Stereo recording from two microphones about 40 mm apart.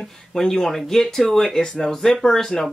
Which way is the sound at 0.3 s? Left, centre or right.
Centre.